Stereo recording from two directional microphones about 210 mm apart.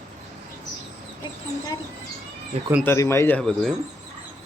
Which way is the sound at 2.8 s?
10° left (ahead or behind).